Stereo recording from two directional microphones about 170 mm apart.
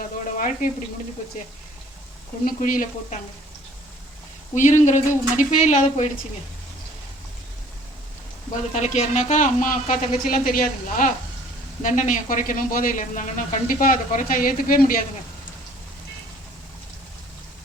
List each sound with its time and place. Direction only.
0.0 s speech: 50° left (ahead or behind)
2.4 s speech: 50° left (ahead or behind)
4.5 s speech: 45° left (ahead or behind)
8.7 s speech: 40° left (ahead or behind)